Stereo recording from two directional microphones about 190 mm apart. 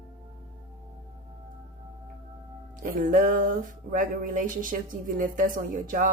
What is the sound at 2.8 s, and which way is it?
Speech, 45° right (ahead or behind).